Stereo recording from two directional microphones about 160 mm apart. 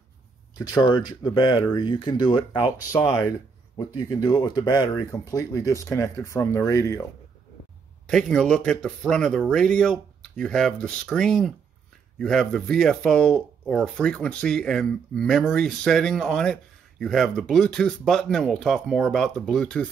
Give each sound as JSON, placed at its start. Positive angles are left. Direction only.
{"t": 0.6, "sound": "speech", "side_deg": 25}
{"t": 2.9, "sound": "speech", "side_deg": 20}
{"t": 8.1, "sound": "speech", "side_deg": 5}